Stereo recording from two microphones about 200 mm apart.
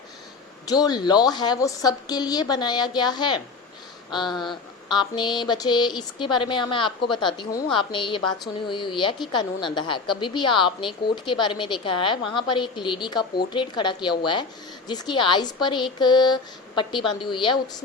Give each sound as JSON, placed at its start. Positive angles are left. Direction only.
{"t": 0.7, "sound": "a woman's voice", "side_deg": 20}